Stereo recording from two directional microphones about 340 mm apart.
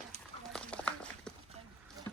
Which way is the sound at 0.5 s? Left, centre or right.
Centre.